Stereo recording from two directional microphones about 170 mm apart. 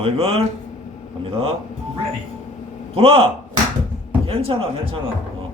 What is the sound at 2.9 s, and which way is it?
Speech, 35° right (ahead or behind).